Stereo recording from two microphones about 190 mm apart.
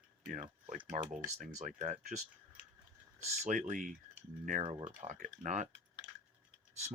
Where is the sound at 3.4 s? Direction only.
40° right (ahead or behind).